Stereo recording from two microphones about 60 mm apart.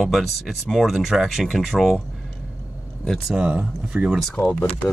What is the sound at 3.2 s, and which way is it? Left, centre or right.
Speech, centre.